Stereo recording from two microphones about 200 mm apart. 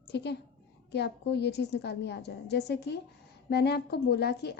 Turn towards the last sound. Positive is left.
turn(degrees=55)  # may be behind; listen again after turning